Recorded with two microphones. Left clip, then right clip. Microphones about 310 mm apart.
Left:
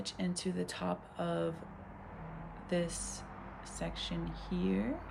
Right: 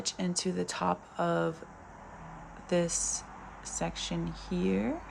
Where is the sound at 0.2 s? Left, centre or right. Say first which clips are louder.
Right 3 dB; right.